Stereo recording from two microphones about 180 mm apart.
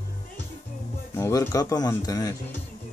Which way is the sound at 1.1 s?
15° left (ahead or behind).